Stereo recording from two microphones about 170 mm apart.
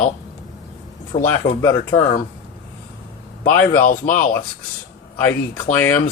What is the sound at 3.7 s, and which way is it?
Speech, 55° left (ahead or behind).